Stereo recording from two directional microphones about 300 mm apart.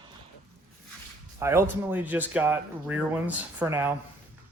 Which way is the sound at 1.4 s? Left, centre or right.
Centre.